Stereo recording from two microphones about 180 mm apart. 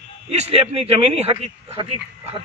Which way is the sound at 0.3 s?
35° right (ahead or behind).